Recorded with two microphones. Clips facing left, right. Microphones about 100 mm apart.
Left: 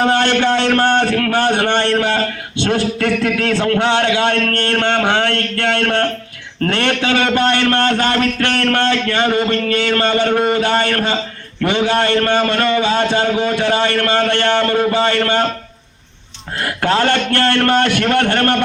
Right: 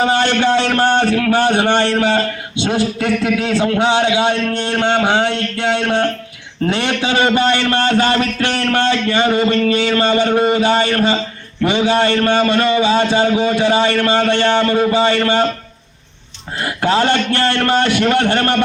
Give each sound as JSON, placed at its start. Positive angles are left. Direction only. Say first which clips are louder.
{"t": 0.0, "sound": "a man's voice", "louder": "even", "side_deg": -10}
{"t": 8.4, "sound": "speech", "louder": "left 1 dB", "side_deg": 50}
{"t": 9.0, "sound": "a man's voice", "louder": "right 1 dB", "side_deg": -10}
{"t": 16.6, "sound": "a man's voice", "louder": "right 1 dB", "side_deg": -10}